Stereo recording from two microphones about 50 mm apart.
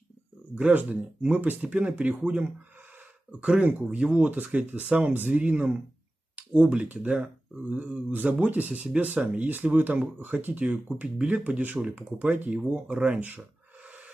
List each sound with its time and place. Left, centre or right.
0.6 s speech: right
10.7 s speech: right
13.8 s gasp: right